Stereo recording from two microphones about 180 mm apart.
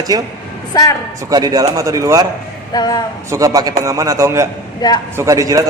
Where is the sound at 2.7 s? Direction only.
20° left (ahead or behind).